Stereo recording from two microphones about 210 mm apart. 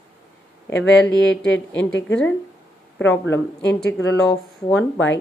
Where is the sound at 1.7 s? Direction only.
60° left (ahead or behind).